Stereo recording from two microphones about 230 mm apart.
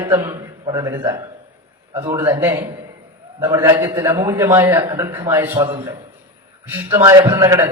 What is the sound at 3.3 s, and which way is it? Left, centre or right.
A man's voice, centre.